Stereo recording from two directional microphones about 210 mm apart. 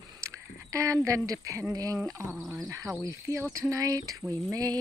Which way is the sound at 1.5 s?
15° right (ahead or behind).